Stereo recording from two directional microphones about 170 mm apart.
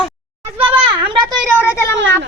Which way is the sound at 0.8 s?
30° right (ahead or behind).